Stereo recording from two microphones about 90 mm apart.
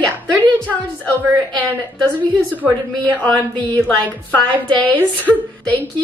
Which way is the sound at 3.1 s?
15° left (ahead or behind).